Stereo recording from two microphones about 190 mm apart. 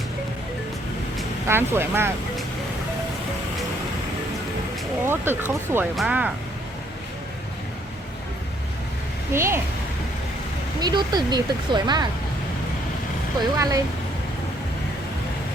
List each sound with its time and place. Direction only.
1.5 s speech: 10° right (ahead or behind)
5.0 s speech: 10° right (ahead or behind)
9.3 s speech: 15° right (ahead or behind)
10.8 s speech: 20° right (ahead or behind)
13.6 s speech: 20° right (ahead or behind)